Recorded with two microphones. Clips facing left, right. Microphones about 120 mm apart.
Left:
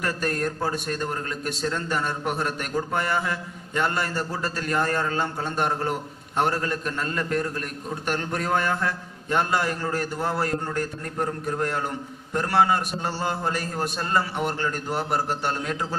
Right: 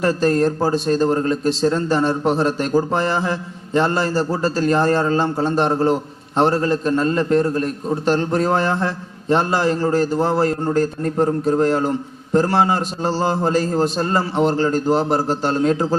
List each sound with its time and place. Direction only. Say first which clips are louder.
0.0 s a man's voice: right 10 dB; 30° right (ahead or behind)